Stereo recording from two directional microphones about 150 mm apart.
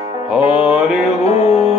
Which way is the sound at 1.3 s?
45° left (ahead or behind).